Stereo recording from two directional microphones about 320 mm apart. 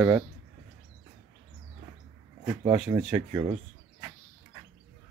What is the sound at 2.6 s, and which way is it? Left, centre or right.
Speech, centre.